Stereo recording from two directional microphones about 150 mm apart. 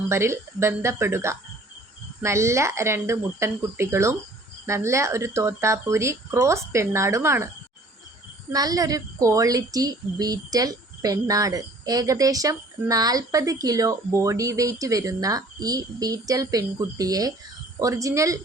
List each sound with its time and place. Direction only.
0.1 s speech: 15° right (ahead or behind)
8.5 s speech: 25° right (ahead or behind)